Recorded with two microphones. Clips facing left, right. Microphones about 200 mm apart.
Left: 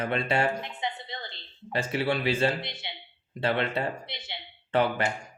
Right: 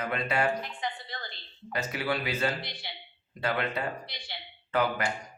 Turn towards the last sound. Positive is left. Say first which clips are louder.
# left 3 dB
turn(degrees=30)  # may be behind; listen again after turning